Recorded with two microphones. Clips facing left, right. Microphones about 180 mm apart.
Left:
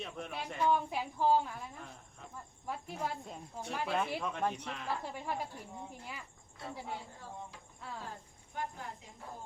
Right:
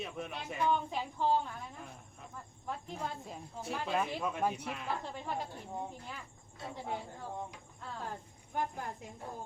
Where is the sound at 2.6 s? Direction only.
5° left (ahead or behind); by 4.8 s 10° right (ahead or behind).